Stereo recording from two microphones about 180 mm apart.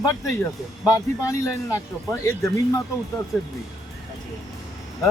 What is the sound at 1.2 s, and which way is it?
Speech, 15° left (ahead or behind).